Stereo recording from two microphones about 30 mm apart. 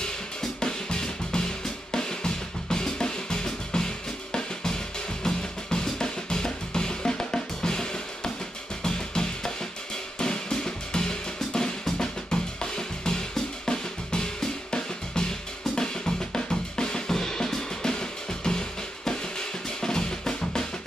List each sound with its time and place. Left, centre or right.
0.6 s music: left
1.9 s drum: left
8.8 s music: left
10.1 s drum: left
16.3 s drum kit: left
17.9 s drum: left